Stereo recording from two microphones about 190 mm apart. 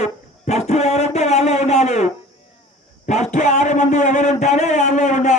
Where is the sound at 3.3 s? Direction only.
40° left (ahead or behind).